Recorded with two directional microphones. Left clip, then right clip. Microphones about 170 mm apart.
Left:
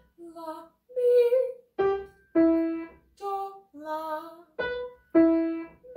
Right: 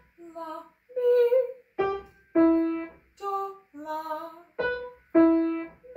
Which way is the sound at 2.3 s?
25° left (ahead or behind).